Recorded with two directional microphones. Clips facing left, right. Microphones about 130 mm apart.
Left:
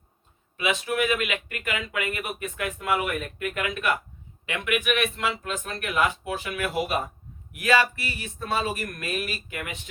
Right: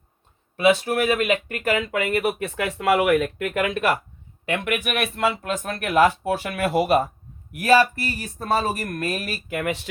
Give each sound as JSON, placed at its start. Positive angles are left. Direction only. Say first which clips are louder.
{"t": 0.5, "sound": "speech", "louder": "right 8 dB", "side_deg": -35}
{"t": 2.1, "sound": "speech", "louder": "right 9 dB", "side_deg": -75}
{"t": 4.6, "sound": "speech", "louder": "left 3 dB", "side_deg": -50}
{"t": 6.3, "sound": "speech", "louder": "right 6 dB", "side_deg": -55}
{"t": 7.5, "sound": "speech", "louder": "right 5 dB", "side_deg": -40}
{"t": 9.5, "sound": "speech", "louder": "right 10 dB", "side_deg": -75}